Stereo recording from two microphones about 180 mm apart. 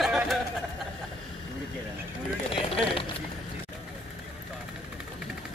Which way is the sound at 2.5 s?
30° left (ahead or behind).